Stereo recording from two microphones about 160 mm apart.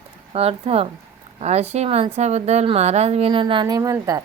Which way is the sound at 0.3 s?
40° right (ahead or behind).